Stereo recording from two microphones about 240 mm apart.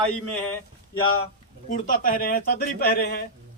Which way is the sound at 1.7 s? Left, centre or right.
Left.